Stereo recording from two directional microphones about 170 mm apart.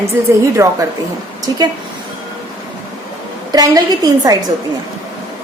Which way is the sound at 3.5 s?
20° right (ahead or behind).